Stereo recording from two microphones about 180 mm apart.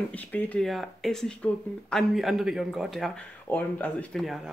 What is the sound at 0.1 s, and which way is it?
Speech, 10° left (ahead or behind).